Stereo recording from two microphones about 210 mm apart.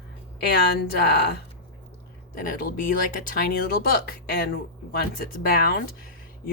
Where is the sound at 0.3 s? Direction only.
50° left (ahead or behind).